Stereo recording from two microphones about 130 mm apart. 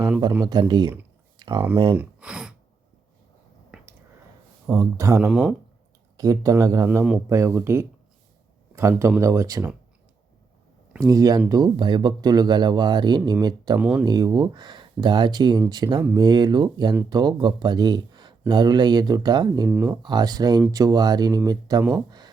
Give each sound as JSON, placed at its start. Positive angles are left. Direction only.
{"t": 0.7, "sound": "speech", "side_deg": -35}
{"t": 1.4, "sound": "a sound", "side_deg": -35}
{"t": 1.7, "sound": "speech", "side_deg": -40}
{"t": 2.0, "sound": "gasp", "side_deg": -10}
{"t": 4.6, "sound": "speech", "side_deg": -20}
{"t": 5.2, "sound": "speech", "side_deg": 0}
{"t": 6.1, "sound": "speech", "side_deg": -25}
{"t": 11.0, "sound": "speech", "side_deg": -25}
{"t": 13.7, "sound": "speech", "side_deg": -10}
{"t": 14.0, "sound": "speech", "side_deg": -30}